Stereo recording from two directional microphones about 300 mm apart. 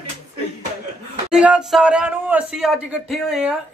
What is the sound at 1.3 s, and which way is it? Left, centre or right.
Speech, centre.